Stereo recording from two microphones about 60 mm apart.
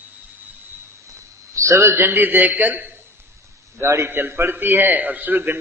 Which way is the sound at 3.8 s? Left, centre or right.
Right.